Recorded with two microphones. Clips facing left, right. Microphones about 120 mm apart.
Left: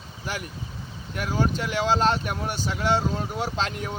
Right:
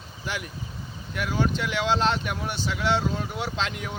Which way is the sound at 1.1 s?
40° left (ahead or behind).